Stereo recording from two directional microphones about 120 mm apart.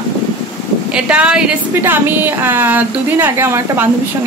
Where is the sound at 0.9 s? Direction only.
10° right (ahead or behind).